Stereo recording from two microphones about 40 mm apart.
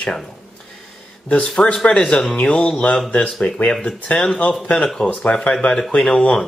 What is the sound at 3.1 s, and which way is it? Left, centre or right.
Speech, left.